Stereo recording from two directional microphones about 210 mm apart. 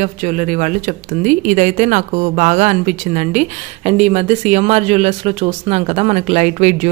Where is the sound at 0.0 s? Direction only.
35° right (ahead or behind).